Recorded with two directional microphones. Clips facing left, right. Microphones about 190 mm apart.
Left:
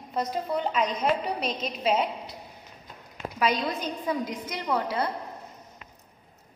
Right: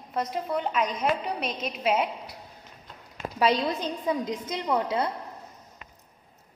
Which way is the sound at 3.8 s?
20° right (ahead or behind).